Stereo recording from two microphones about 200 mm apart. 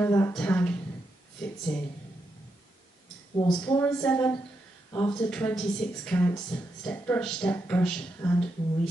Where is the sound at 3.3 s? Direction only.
20° left (ahead or behind).